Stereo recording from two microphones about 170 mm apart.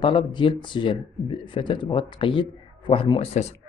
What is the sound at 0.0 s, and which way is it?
Speech, 30° left (ahead or behind).